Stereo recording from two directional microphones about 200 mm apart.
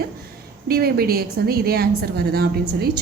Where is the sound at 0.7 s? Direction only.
50° right (ahead or behind).